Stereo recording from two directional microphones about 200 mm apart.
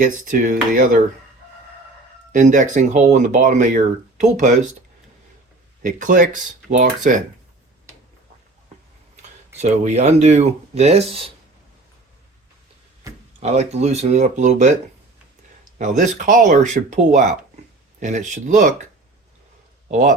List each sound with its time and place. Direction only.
0.0 s speech: 40° right (ahead or behind)
2.3 s speech: 40° right (ahead or behind)
5.8 s speech: 40° right (ahead or behind)
9.6 s speech: 35° right (ahead or behind)
13.4 s speech: 35° right (ahead or behind)
15.8 s speech: 40° right (ahead or behind)
19.9 s speech: 40° right (ahead or behind)